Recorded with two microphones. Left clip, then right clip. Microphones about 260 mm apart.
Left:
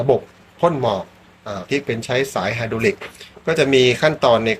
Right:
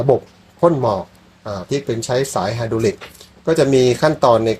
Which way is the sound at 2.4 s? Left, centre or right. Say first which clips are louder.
Right 1 dB; right.